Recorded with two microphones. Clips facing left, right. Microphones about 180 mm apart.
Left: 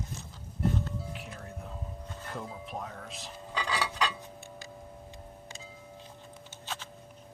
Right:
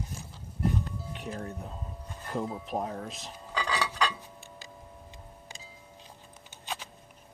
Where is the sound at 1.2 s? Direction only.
35° right (ahead or behind).